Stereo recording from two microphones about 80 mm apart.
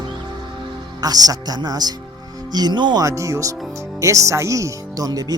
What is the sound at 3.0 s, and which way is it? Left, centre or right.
Speech, right.